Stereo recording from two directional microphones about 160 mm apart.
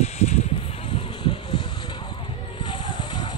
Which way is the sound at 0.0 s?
45° left (ahead or behind).